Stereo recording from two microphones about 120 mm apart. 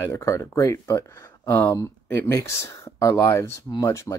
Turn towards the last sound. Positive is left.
turn(degrees=25)  # may be behind; listen again after turning